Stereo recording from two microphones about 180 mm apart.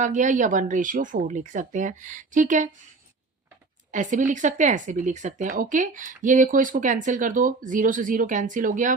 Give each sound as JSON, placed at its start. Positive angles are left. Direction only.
{"t": 0.0, "sound": "speech", "side_deg": -45}
{"t": 3.9, "sound": "speech", "side_deg": -45}